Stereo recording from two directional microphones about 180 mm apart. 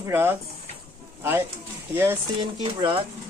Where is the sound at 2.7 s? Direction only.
30° right (ahead or behind).